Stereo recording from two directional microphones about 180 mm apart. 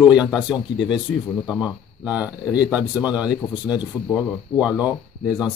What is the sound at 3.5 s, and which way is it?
Speech, 25° left (ahead or behind).